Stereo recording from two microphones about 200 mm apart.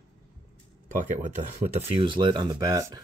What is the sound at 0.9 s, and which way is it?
Speech, 40° right (ahead or behind).